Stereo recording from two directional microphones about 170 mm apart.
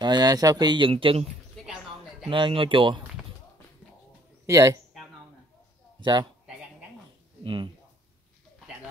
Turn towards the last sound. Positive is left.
turn(degrees=-30)  # may be behind; listen again after turning